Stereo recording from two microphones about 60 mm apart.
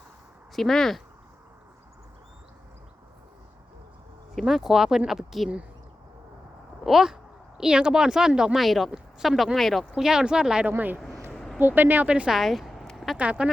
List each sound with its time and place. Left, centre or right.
0.5 s speech: centre
4.4 s speech: centre
6.8 s speech: centre
9.9 s speech: centre
10.7 s speech: right
11.3 s a sound: centre
11.6 s speech: right
12.0 s a woman's voice: centre
12.3 s a sound: centre
13.4 s speech: centre